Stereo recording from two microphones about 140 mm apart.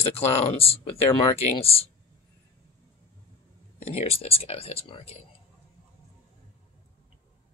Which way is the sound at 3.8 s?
45° left (ahead or behind).